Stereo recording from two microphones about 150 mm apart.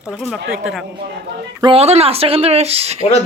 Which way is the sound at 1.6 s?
40° right (ahead or behind).